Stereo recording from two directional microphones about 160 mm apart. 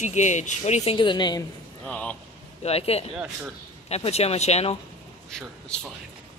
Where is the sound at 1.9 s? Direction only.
10° left (ahead or behind).